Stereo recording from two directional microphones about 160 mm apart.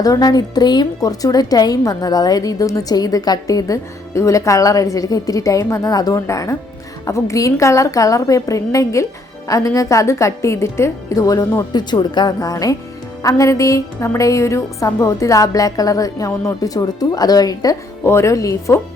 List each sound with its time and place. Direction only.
0.0 s a woman's voice: 25° left (ahead or behind)